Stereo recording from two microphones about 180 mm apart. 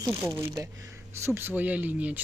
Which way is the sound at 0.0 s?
15° right (ahead or behind).